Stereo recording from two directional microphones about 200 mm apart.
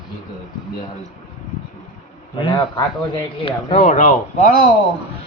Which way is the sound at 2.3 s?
25° left (ahead or behind).